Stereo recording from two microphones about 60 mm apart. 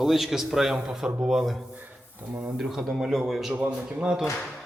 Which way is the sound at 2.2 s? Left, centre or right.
Right.